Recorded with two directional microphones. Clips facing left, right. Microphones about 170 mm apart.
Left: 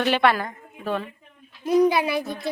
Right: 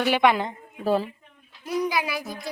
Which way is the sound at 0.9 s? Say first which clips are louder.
Right 4 dB; 35° right (ahead or behind).